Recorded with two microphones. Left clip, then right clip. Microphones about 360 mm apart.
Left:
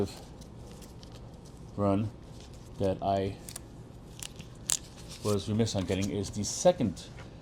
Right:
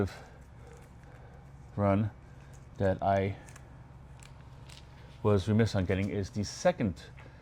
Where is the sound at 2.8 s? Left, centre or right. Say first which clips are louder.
Right 1 dB; right.